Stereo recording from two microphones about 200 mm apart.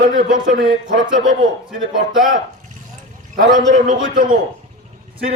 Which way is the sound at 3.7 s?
40° right (ahead or behind).